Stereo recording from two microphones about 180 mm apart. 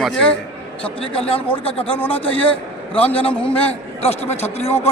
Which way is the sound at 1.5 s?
30° left (ahead or behind).